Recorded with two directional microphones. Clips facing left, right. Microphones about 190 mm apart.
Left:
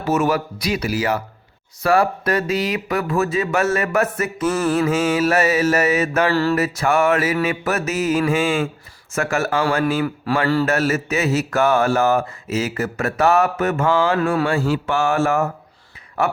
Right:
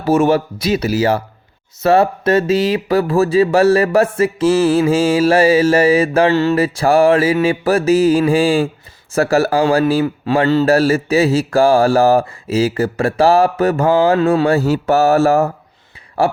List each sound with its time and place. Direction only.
0.0 s a man's voice: 30° right (ahead or behind)
14.4 s a man's voice: 40° right (ahead or behind)